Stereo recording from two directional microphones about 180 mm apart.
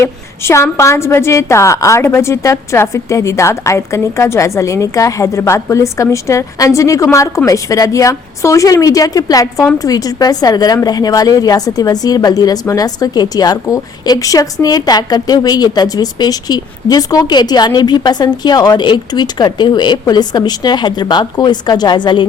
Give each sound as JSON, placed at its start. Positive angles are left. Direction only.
{"t": 0.0, "sound": "a woman's voice", "side_deg": 15}